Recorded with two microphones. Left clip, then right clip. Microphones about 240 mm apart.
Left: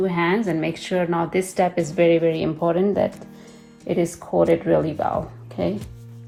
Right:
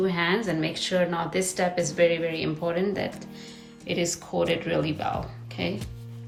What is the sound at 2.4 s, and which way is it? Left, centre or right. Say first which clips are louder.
Speech: left 6 dB; centre.